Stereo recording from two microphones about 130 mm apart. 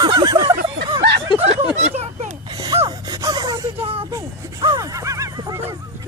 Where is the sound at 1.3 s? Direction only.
35° left (ahead or behind).